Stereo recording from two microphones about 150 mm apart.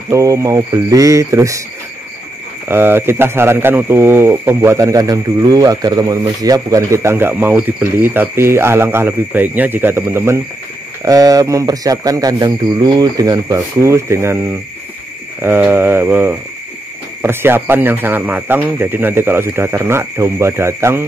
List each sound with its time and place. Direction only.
0.1 s speech: 20° right (ahead or behind)
2.7 s speech: 15° right (ahead or behind)